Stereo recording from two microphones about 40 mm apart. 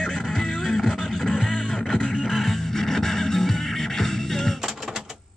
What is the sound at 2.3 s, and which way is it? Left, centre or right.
Music, centre.